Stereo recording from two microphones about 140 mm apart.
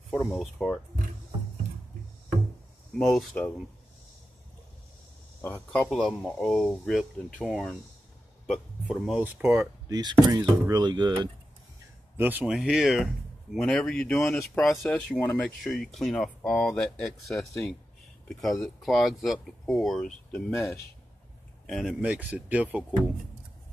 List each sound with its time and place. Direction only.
0.3 s speech: centre (ahead or behind)
2.9 s speech: centre (ahead or behind)
5.4 s speech: 10° left (ahead or behind); by 9.6 s 15° right (ahead or behind)
9.8 s speech: 30° right (ahead or behind)
12.2 s speech: 15° right (ahead or behind)
22.0 s speech: 10° right (ahead or behind)